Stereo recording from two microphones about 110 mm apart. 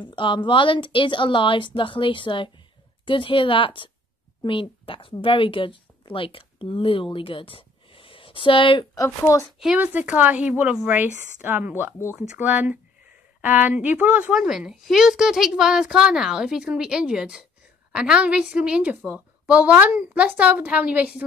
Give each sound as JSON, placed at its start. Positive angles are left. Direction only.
{"t": 0.0, "sound": "a woman's voice", "side_deg": 45}
{"t": 8.9, "sound": "speech", "side_deg": 30}
{"t": 9.8, "sound": "a woman's voice", "side_deg": -15}